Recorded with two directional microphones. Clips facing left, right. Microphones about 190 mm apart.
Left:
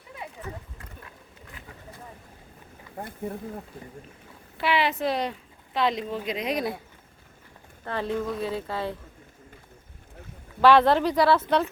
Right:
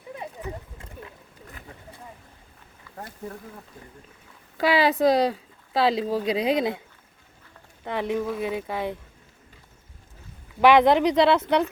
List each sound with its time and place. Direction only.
4.6 s speech: 35° right (ahead or behind)
7.9 s speech: 15° right (ahead or behind)
10.6 s speech: 15° right (ahead or behind)